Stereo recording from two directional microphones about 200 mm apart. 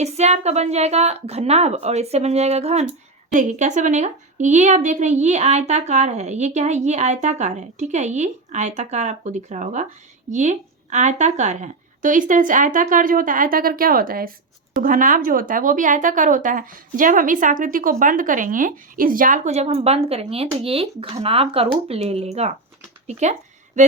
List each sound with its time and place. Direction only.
0.0 s a woman's voice: 35° right (ahead or behind)